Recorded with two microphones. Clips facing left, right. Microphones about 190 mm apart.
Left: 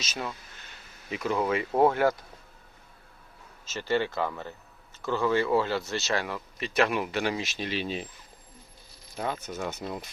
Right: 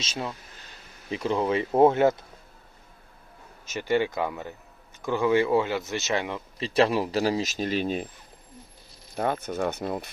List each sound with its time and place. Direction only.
0.0 s speech: 30° right (ahead or behind)
3.7 s speech: 15° right (ahead or behind); by 8.0 s 50° right (ahead or behind)
9.1 s speech: 55° right (ahead or behind)